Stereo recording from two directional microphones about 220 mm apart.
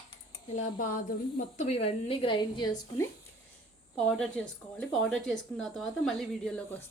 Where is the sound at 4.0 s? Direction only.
5° left (ahead or behind).